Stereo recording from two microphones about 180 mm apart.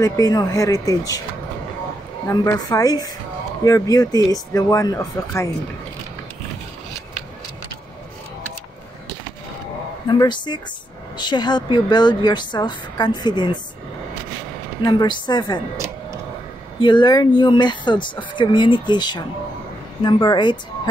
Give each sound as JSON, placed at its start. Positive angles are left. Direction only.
{"t": 0.0, "sound": "speech", "side_deg": 20}
{"t": 2.2, "sound": "speech", "side_deg": 15}
{"t": 10.0, "sound": "speech", "side_deg": 25}
{"t": 14.8, "sound": "speech", "side_deg": 20}
{"t": 16.8, "sound": "speech", "side_deg": 25}